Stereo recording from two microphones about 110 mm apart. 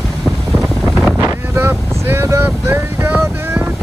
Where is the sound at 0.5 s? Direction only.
Centre (ahead or behind).